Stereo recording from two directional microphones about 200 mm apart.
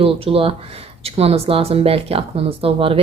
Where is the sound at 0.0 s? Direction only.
30° right (ahead or behind).